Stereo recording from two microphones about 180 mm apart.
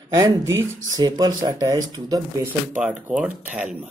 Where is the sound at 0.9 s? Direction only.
20° right (ahead or behind).